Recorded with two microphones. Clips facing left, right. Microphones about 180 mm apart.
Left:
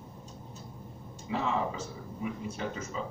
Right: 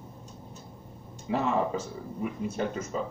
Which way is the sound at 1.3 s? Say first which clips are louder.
Right 4 dB; 55° right (ahead or behind).